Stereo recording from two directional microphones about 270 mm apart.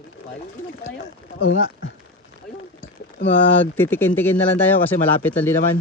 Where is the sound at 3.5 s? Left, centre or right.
Centre.